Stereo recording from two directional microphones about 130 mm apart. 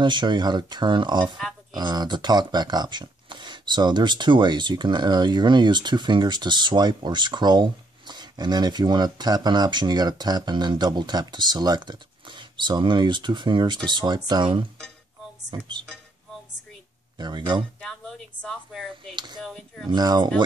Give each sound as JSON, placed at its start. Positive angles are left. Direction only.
{"t": 0.0, "sound": "speech", "side_deg": -35}
{"t": 17.2, "sound": "speech", "side_deg": -35}
{"t": 17.7, "sound": "speech", "side_deg": 5}
{"t": 19.1, "sound": "speech", "side_deg": -35}
{"t": 19.4, "sound": "speech", "side_deg": 0}
{"t": 19.9, "sound": "speech", "side_deg": -30}